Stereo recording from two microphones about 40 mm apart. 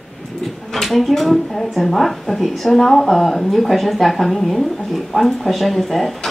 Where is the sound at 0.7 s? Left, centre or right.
Centre.